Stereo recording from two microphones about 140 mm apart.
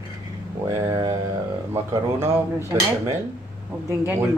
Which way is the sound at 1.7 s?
20° right (ahead or behind).